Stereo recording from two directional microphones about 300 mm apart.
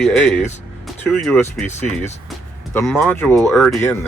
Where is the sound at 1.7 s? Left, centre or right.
Left.